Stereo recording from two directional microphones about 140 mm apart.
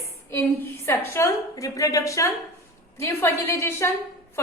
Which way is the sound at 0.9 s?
20° left (ahead or behind).